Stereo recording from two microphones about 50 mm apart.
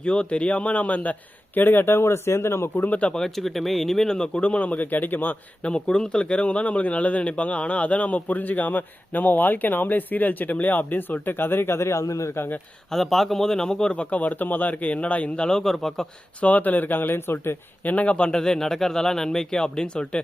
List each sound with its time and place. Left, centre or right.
0.0 s speech: left
1.5 s speech: left
2.7 s speech: left
3.2 s speech: centre; by 5.4 s left
5.6 s speech: centre; by 12.4 s left
12.9 s speech: centre
13.9 s speech: left
15.4 s speech: centre
16.4 s speech: left
17.8 s speech: left